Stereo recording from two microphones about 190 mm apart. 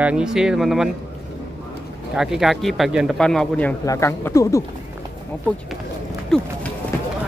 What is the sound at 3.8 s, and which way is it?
Speech, 15° left (ahead or behind).